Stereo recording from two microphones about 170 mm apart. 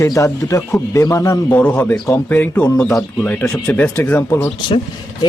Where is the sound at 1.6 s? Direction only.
10° left (ahead or behind).